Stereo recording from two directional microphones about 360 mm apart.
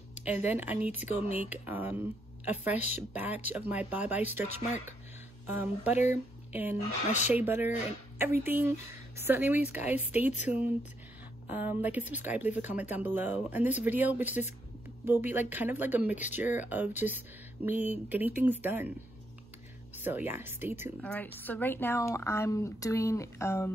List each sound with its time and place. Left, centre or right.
0.2 s speech: centre
10.4 s a woman's voice: centre
11.5 s speech: centre
20.0 s a woman's voice: centre